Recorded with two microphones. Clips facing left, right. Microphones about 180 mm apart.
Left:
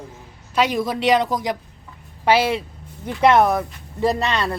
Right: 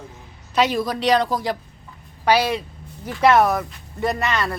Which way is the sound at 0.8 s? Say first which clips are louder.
Left 1 dB; 20° left (ahead or behind).